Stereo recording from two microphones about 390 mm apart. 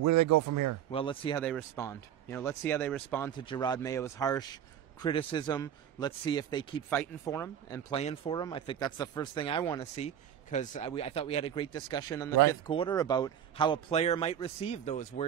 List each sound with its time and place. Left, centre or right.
0.0 s speech: right
0.9 s a man's voice: centre